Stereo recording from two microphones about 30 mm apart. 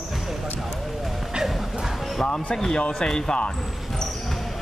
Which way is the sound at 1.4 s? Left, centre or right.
Right.